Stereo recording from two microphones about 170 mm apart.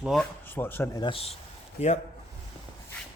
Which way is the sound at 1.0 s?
35° left (ahead or behind).